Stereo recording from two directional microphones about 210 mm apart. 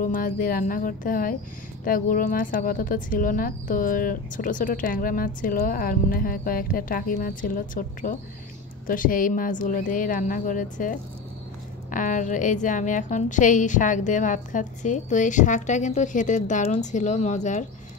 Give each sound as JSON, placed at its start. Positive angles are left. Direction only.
{"t": 0.0, "sound": "a woman's voice", "side_deg": 40}